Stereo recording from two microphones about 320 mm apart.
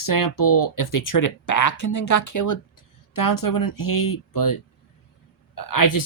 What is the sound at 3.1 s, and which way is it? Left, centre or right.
Speech, left.